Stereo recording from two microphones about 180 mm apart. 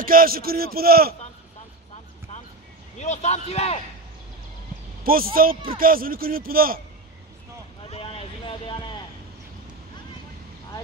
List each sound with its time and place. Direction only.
0.0 s a man's voice: 55° right (ahead or behind)
3.0 s a man's voice: 40° left (ahead or behind)
5.0 s speech: 55° right (ahead or behind)
7.8 s vehicle: 30° left (ahead or behind)